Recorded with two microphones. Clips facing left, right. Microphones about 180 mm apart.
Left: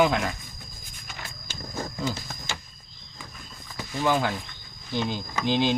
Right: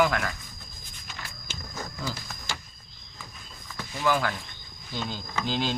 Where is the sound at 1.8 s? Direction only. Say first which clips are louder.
Left 5 dB; 25° left (ahead or behind).